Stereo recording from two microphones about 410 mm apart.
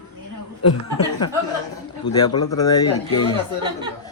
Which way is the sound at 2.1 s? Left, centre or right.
Centre.